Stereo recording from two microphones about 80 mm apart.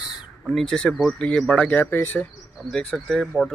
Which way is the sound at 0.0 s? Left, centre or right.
Centre.